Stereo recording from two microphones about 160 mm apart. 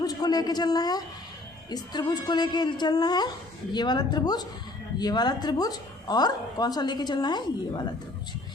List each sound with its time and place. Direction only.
0.0 s a man's voice: 25° left (ahead or behind)